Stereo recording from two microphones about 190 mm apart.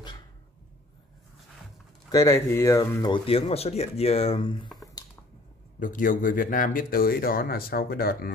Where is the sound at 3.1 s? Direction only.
30° left (ahead or behind).